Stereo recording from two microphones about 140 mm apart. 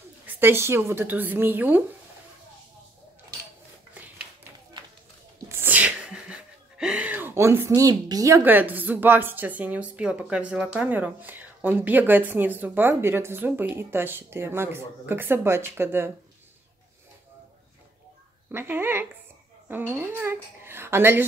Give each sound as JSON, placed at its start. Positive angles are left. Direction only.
{"t": 0.4, "sound": "speech", "side_deg": -15}
{"t": 5.5, "sound": "sneeze", "side_deg": -15}
{"t": 10.5, "sound": "speech", "side_deg": -10}
{"t": 18.5, "sound": "speech", "side_deg": -15}